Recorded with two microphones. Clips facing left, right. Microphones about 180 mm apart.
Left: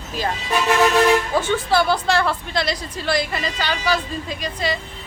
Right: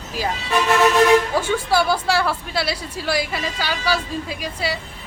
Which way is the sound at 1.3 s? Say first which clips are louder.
Left 1 dB; 10° right (ahead or behind).